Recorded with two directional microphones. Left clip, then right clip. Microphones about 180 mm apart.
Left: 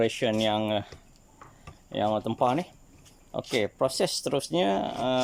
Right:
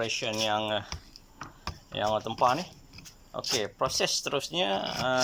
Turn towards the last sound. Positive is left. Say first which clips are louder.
# left 2 dB
turn(degrees=30)  # may be behind; listen again after turning